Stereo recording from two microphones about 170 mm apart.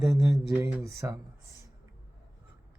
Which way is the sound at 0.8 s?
20° right (ahead or behind).